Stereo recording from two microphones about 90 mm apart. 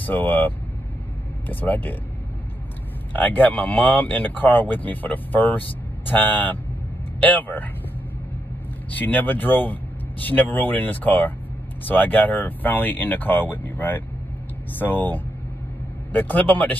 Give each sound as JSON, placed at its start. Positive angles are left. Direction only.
{"t": 0.0, "sound": "speech", "side_deg": 20}
{"t": 3.1, "sound": "speech", "side_deg": 20}
{"t": 8.9, "sound": "speech", "side_deg": 20}